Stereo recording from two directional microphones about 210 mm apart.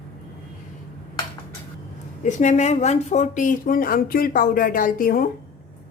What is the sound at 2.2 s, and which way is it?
Speech, 35° left (ahead or behind).